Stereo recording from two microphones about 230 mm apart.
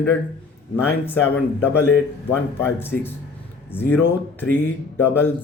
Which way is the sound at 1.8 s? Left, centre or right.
Centre.